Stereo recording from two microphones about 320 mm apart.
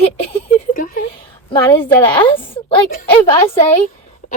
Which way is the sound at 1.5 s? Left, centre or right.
Centre.